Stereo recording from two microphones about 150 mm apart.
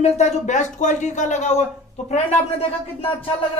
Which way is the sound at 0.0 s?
50° left (ahead or behind).